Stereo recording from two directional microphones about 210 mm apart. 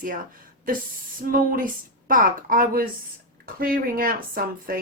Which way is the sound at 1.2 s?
40° right (ahead or behind).